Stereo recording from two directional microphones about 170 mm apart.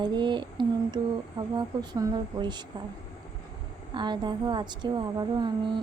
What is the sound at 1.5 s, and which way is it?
Speech, 25° right (ahead or behind).